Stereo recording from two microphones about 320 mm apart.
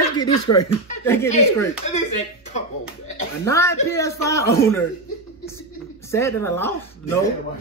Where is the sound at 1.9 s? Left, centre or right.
Left.